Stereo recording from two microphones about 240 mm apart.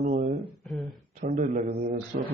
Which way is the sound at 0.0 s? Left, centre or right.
Right.